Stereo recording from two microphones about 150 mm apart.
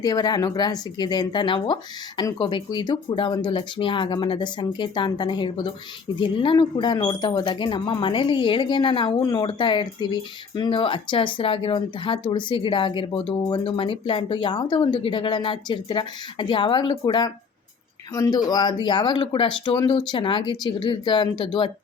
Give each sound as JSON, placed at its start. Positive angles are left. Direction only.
{"t": 0.0, "sound": "speech", "side_deg": 25}